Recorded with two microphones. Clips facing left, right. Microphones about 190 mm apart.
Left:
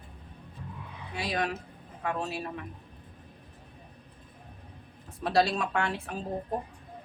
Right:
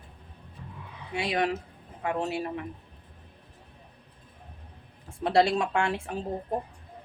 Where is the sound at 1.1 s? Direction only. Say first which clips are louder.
Right 4 dB; 25° right (ahead or behind).